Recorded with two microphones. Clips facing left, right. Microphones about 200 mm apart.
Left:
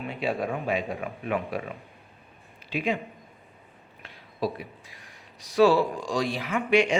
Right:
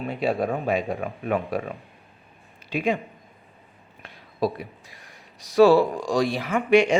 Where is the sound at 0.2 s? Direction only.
40° right (ahead or behind).